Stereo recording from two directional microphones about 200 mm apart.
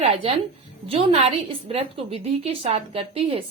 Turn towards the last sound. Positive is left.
turn(degrees=-30)  # may be behind; listen again after turning